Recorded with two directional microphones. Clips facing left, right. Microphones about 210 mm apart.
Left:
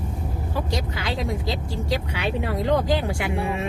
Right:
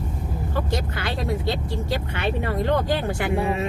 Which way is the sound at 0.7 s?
60° right (ahead or behind).